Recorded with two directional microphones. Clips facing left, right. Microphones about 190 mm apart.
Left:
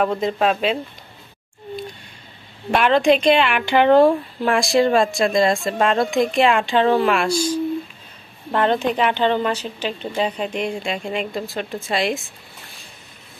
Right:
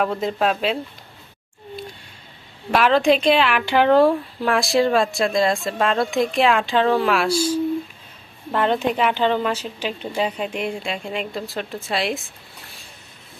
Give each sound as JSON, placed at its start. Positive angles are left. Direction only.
{"t": 0.0, "sound": "a woman's voice", "side_deg": 0}
{"t": 2.7, "sound": "a woman's voice", "side_deg": 0}